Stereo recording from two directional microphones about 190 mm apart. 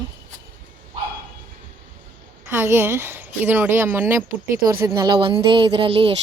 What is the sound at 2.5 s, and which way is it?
Speech, 10° right (ahead or behind).